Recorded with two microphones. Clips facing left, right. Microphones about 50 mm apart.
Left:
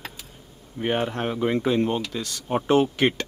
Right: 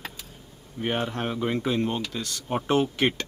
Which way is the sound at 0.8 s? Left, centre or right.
Centre.